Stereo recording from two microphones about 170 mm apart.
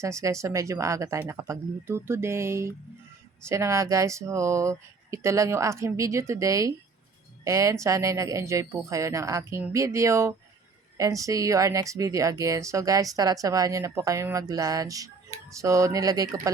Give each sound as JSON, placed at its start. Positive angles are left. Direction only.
{"t": 0.0, "sound": "speech", "side_deg": -15}